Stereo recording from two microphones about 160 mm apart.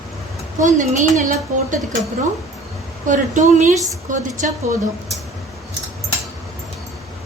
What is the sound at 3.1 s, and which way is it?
Speech, 50° right (ahead or behind).